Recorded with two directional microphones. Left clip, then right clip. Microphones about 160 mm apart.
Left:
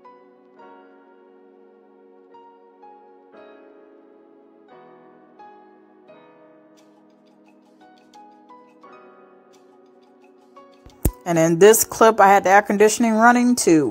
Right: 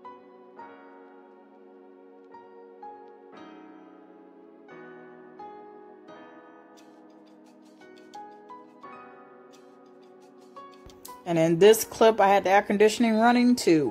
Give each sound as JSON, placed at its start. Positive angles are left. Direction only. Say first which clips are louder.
{"t": 11.2, "sound": "a woman's voice", "louder": "left 5 dB", "side_deg": 20}